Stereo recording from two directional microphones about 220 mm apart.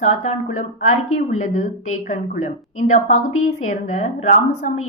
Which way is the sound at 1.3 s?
30° left (ahead or behind).